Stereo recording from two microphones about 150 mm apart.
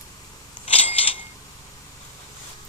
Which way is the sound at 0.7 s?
40° left (ahead or behind).